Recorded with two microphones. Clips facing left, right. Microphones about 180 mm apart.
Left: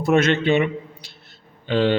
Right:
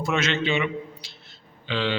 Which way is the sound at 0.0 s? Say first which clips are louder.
Left 7 dB; 55° left (ahead or behind).